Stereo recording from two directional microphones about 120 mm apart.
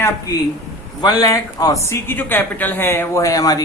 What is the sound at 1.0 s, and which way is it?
Speech, 30° left (ahead or behind).